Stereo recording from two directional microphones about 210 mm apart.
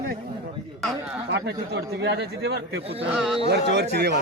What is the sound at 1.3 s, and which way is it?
A man's voice, 50° right (ahead or behind).